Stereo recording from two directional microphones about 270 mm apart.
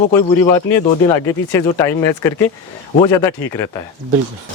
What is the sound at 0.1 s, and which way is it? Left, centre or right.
Speech, centre.